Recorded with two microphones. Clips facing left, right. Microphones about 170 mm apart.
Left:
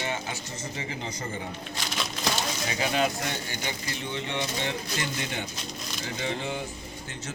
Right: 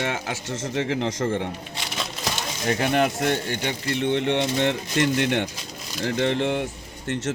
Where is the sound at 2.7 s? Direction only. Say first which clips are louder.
Right 7 dB; 60° right (ahead or behind).